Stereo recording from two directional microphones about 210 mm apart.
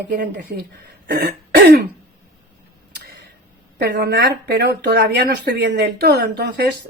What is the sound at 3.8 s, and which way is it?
Speech, 50° right (ahead or behind).